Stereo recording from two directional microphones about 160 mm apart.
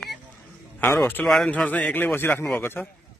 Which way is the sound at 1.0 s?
10° left (ahead or behind).